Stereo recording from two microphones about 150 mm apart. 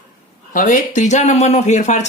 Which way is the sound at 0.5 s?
60° left (ahead or behind).